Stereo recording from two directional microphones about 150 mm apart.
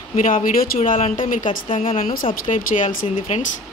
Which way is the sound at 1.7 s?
40° left (ahead or behind).